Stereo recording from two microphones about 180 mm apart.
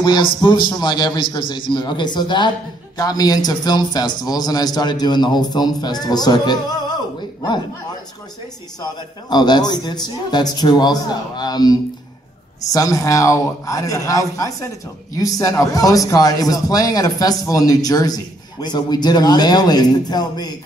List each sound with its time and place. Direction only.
0.0 s a man's voice: 25° left (ahead or behind)
8.8 s a man's voice: 25° left (ahead or behind)